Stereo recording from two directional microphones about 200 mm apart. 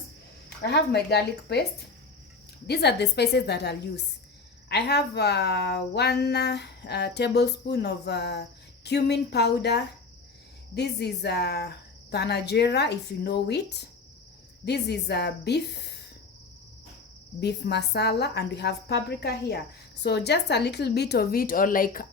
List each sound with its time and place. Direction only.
0.6 s speech: 55° left (ahead or behind)
2.6 s speech: 55° left (ahead or behind)
17.4 s speech: 55° left (ahead or behind)